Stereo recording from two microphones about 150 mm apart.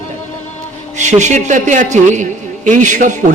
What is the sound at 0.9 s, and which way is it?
A man's voice, 50° right (ahead or behind).